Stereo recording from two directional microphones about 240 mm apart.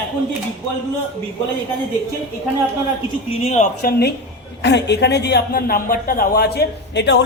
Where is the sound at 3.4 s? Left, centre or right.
Left.